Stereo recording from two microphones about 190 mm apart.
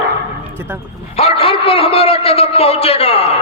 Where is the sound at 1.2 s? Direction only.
30° left (ahead or behind).